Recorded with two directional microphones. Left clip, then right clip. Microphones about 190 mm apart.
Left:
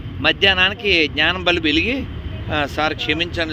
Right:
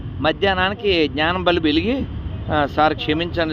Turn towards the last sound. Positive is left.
turn(degrees=-15)  # may be behind; listen again after turning